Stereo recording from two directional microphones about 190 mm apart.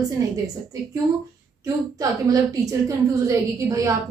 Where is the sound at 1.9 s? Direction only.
20° right (ahead or behind).